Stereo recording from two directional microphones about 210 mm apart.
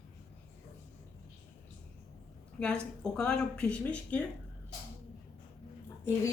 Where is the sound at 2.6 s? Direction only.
5° left (ahead or behind).